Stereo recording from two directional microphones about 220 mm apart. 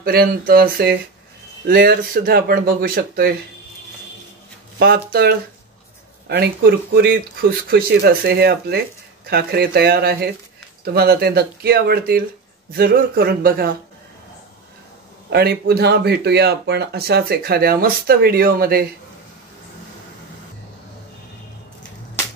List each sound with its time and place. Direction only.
0.0 s speech: 40° right (ahead or behind)
4.7 s speech: 45° right (ahead or behind)
15.2 s speech: 45° right (ahead or behind)